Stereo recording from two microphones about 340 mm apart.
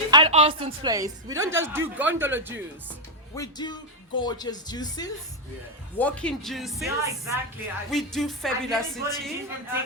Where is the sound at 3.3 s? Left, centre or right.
Centre.